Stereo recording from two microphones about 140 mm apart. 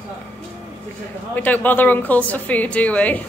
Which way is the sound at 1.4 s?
15° left (ahead or behind).